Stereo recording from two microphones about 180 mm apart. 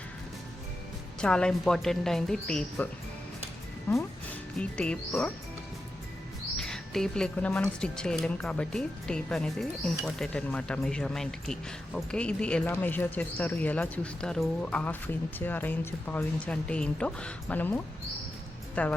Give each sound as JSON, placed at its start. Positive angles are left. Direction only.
{"t": 1.2, "sound": "speech", "side_deg": 5}
{"t": 4.5, "sound": "speech", "side_deg": 5}
{"t": 6.6, "sound": "speech", "side_deg": 5}